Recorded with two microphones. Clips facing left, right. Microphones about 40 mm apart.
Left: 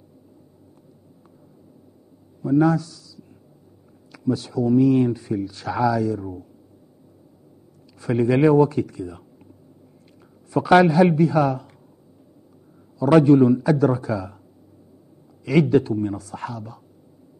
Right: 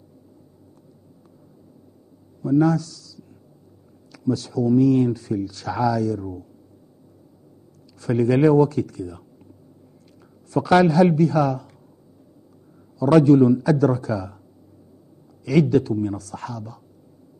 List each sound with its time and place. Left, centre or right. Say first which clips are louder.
2.4 s speech: even; centre
8.0 s speech: even; centre
10.5 s speech: left 1 dB; centre
13.0 s speech: even; centre
15.4 s speech: even; left